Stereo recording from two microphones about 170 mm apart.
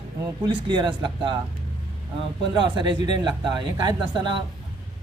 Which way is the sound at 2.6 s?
25° right (ahead or behind).